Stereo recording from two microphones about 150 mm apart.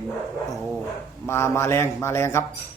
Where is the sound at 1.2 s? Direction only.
15° left (ahead or behind).